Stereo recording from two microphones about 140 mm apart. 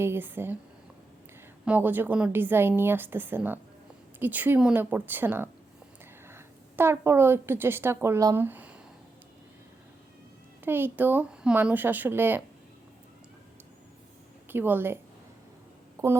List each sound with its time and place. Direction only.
0.0 s a woman's voice: 15° right (ahead or behind)
1.6 s a woman's voice: 10° right (ahead or behind)
10.6 s a woman's voice: 15° right (ahead or behind)
14.5 s a woman's voice: 15° right (ahead or behind)
16.0 s speech: 20° right (ahead or behind)